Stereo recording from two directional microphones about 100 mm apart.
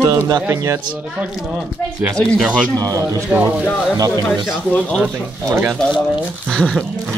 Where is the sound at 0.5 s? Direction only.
30° right (ahead or behind).